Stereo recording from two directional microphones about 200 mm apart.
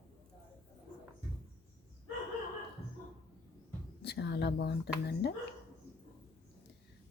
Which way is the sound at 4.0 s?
55° left (ahead or behind).